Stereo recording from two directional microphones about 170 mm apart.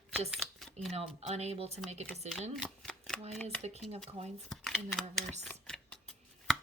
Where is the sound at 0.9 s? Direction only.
35° right (ahead or behind).